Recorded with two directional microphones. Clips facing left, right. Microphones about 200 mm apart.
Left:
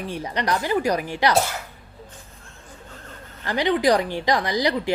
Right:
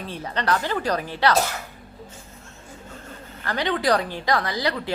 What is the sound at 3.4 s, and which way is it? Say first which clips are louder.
A woman's voice: left 3 dB; 15° left (ahead or behind).